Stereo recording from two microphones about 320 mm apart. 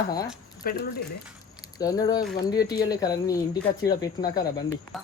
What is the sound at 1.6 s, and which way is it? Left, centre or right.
Speech, centre.